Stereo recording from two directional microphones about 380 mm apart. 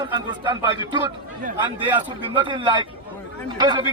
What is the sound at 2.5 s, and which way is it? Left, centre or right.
A man's voice, centre.